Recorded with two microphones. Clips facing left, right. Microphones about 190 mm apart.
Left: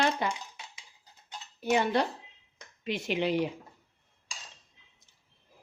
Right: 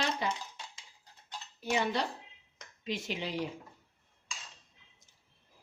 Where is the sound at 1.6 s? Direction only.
55° left (ahead or behind).